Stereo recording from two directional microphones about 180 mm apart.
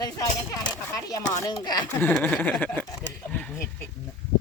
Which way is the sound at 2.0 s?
10° left (ahead or behind).